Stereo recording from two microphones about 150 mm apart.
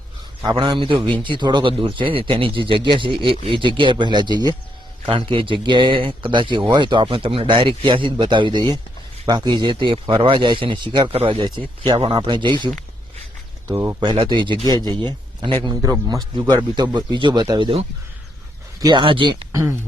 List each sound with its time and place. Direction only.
0.5 s speech: 30° right (ahead or behind)
13.7 s a man's voice: 20° right (ahead or behind)
14.1 s a man's voice: 30° right (ahead or behind)